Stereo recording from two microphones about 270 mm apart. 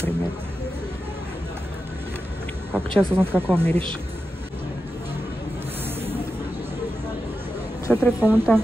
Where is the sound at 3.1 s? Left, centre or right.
Centre.